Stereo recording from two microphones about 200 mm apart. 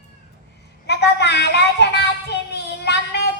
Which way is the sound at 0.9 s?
55° left (ahead or behind).